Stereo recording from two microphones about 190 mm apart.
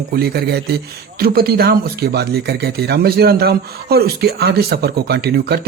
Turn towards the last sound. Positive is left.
turn(degrees=-60)  # may be behind; listen again after turning